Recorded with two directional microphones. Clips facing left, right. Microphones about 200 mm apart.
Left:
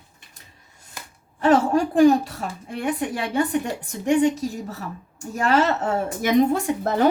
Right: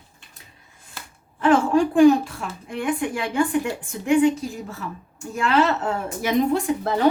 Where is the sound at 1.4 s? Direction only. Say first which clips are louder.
Even; 40° left (ahead or behind).